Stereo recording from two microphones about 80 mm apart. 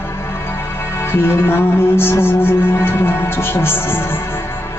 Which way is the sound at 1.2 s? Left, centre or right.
Left.